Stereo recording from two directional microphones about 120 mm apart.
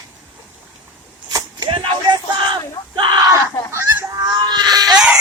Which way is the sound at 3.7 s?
25° right (ahead or behind).